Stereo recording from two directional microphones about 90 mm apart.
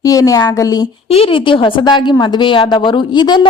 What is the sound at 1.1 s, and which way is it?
A woman's voice, 85° left.